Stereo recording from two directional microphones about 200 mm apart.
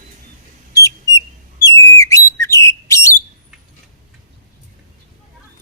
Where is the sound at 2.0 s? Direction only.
15° left (ahead or behind).